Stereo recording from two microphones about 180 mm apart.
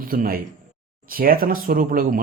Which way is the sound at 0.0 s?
50° right (ahead or behind).